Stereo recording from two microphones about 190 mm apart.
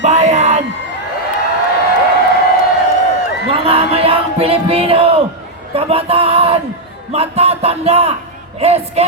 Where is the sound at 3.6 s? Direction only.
30° right (ahead or behind).